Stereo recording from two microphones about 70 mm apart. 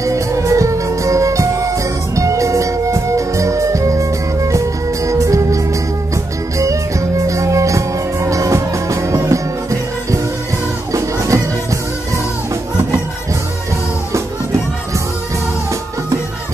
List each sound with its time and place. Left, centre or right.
0.0 s music: right
6.6 s music: right